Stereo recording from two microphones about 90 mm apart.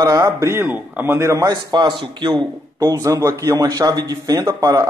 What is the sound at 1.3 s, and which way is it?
A man's voice, 50° right (ahead or behind).